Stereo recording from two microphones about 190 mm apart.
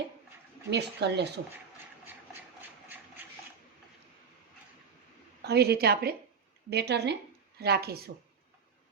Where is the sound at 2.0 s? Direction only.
10° right (ahead or behind).